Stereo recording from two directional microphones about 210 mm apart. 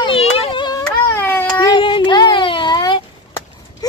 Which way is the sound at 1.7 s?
25° left (ahead or behind).